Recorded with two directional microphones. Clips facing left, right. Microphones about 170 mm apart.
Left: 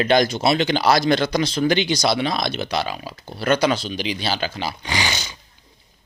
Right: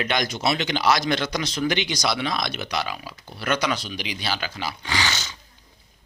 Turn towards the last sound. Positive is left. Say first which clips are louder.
# left 2 dB
turn(degrees=15)  # may be behind; listen again after turning